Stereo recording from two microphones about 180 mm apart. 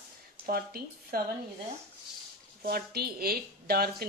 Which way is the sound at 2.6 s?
60° right (ahead or behind).